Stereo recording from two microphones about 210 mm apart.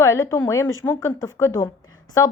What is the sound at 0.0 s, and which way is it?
Speech, 15° left (ahead or behind).